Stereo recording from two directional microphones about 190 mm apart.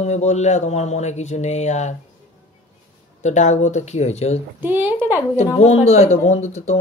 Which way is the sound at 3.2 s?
40° left (ahead or behind).